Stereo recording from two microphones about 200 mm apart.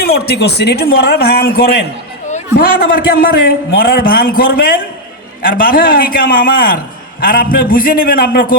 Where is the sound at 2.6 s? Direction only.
45° left (ahead or behind).